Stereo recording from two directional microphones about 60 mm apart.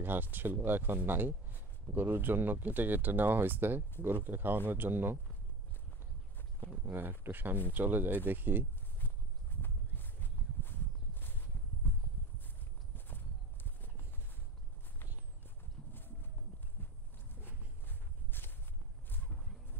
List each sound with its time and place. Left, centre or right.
0.0 s speech: right
6.9 s speech: right
9.0 s a sound: left
17.4 s walk: left